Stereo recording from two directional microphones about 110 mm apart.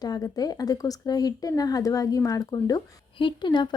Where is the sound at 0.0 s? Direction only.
35° left (ahead or behind).